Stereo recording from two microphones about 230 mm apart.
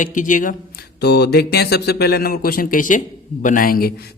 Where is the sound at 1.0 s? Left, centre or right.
Left.